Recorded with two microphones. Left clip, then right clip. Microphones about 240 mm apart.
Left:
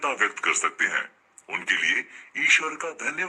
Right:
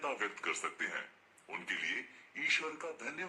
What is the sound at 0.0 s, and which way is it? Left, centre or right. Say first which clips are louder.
A man's voice: left 13 dB; left.